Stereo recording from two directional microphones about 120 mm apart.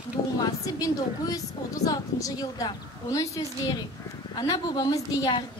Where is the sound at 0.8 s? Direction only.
30° left (ahead or behind).